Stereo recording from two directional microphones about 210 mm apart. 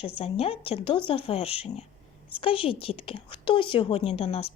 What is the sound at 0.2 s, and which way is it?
A woman's voice, 25° left (ahead or behind).